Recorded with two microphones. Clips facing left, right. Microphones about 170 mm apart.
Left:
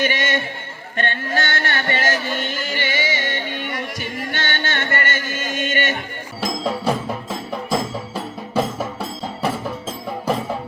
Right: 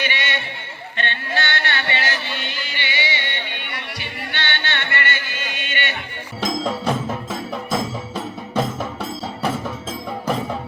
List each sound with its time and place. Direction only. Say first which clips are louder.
0.0 s a sound: left 5 dB; 45° left (ahead or behind)
0.9 s music: left 3 dB; 45° left (ahead or behind)
6.4 s music: even; 5° left (ahead or behind)